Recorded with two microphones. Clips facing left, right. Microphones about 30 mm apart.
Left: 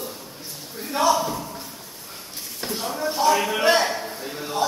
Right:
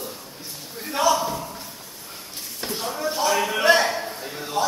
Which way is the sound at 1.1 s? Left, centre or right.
Centre.